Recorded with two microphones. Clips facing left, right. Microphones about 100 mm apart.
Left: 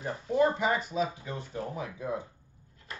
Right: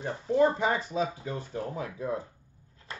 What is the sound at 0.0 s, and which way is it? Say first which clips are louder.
Speech: right 2 dB; 30° right (ahead or behind).